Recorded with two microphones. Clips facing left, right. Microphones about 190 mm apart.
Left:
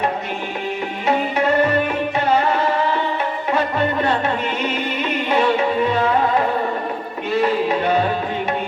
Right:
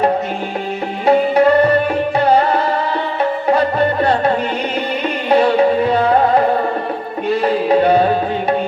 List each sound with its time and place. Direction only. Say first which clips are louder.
1.0 s music: right 8 dB; 35° right (ahead or behind)
5.3 s music: right 6 dB; 35° right (ahead or behind)
7.4 s music: right 6 dB; 35° right (ahead or behind)